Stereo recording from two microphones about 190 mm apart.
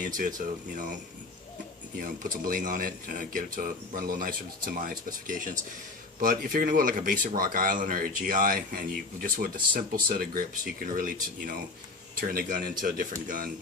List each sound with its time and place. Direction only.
0.0 s speech: 45° right (ahead or behind)
2.0 s speech: 45° right (ahead or behind)